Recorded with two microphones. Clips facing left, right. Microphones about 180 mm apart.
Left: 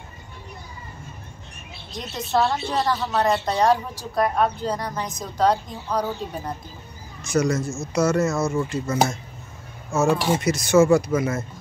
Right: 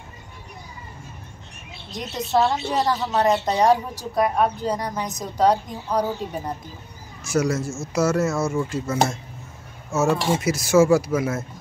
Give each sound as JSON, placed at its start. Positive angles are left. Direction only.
{"t": 2.3, "sound": "speech", "side_deg": -10}
{"t": 2.9, "sound": "a woman's voice", "side_deg": -20}
{"t": 7.2, "sound": "speech", "side_deg": -5}